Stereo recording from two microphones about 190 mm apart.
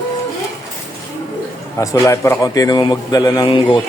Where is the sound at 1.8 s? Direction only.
15° left (ahead or behind).